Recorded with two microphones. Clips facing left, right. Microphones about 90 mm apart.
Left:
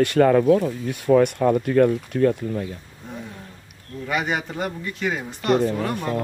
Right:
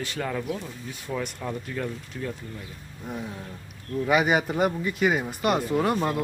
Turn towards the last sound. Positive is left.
turn(degrees=-5)  # may be behind; listen again after turning